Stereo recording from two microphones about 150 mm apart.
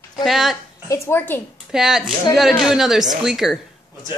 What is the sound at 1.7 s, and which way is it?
A woman's voice, 5° right (ahead or behind).